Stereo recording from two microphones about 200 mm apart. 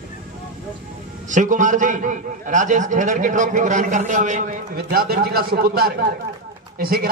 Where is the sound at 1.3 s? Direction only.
40° right (ahead or behind).